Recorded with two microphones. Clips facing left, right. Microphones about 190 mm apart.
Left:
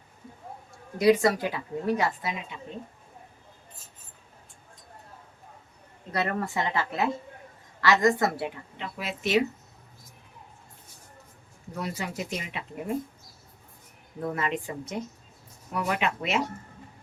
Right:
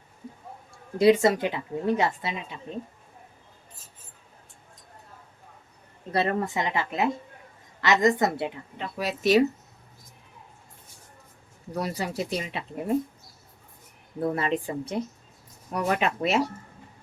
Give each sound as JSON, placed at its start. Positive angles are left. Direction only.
{"t": 0.9, "sound": "a woman's voice", "side_deg": -25}
{"t": 6.1, "sound": "a woman's voice", "side_deg": -25}
{"t": 8.8, "sound": "speech", "side_deg": -40}
{"t": 11.7, "sound": "speech", "side_deg": -35}
{"t": 14.2, "sound": "speech", "side_deg": -35}